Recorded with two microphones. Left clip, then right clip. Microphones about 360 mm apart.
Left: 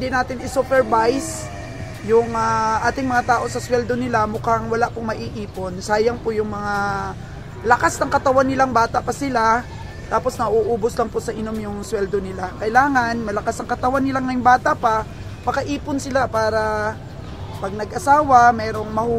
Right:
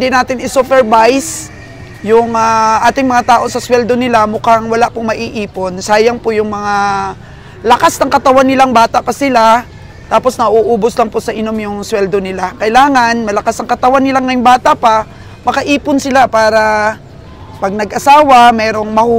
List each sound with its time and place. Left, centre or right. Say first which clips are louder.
0.0 s speech: right 11 dB; right